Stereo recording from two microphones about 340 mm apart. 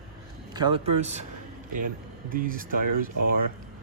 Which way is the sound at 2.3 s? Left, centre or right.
Right.